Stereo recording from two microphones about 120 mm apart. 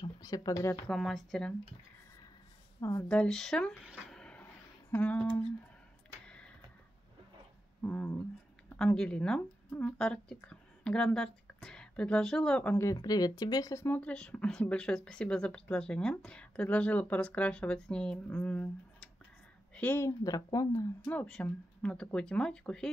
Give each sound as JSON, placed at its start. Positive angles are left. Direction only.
{"t": 0.0, "sound": "speech", "side_deg": 35}
{"t": 0.8, "sound": "a woman's voice", "side_deg": 5}
{"t": 2.8, "sound": "speech", "side_deg": 30}
{"t": 3.1, "sound": "speech", "side_deg": 5}
{"t": 4.0, "sound": "a sound", "side_deg": 5}
{"t": 4.9, "sound": "speech", "side_deg": 15}
{"t": 6.2, "sound": "a sound", "side_deg": 10}
{"t": 7.8, "sound": "a woman's voice", "side_deg": 15}
{"t": 12.9, "sound": "speech", "side_deg": 35}
{"t": 13.8, "sound": "speech", "side_deg": 15}
{"t": 21.1, "sound": "speech", "side_deg": 10}